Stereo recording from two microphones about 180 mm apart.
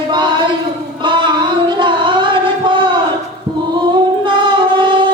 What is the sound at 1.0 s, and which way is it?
Singing, 25° right (ahead or behind).